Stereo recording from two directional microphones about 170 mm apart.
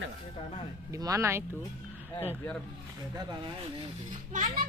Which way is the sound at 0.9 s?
20° right (ahead or behind).